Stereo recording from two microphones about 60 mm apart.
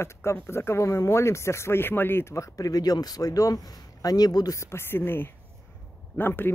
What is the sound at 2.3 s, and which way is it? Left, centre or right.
Speech, left.